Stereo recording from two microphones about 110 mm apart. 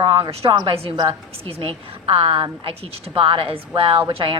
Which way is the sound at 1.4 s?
60° right (ahead or behind).